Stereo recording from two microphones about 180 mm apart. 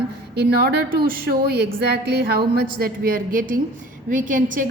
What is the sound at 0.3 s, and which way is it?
A woman's voice, 65° right (ahead or behind).